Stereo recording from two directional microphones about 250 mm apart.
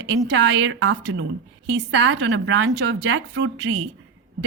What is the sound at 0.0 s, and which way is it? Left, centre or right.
A woman's voice, right.